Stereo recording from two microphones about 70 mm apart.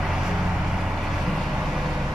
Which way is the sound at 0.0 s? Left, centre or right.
Centre.